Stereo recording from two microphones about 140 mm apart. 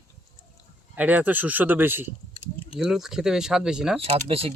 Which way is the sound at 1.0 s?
10° right (ahead or behind).